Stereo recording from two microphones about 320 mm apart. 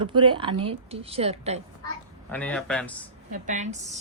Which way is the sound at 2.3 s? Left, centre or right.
Centre.